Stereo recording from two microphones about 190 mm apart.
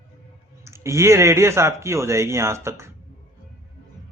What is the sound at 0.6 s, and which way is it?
Speech, 15° right (ahead or behind).